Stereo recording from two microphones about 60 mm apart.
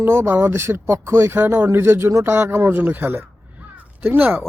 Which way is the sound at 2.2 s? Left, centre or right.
Right.